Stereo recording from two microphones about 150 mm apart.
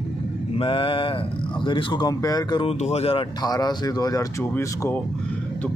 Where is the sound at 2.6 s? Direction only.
45° left (ahead or behind).